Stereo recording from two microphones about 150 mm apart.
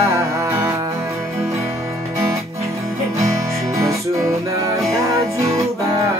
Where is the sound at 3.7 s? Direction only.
20° right (ahead or behind).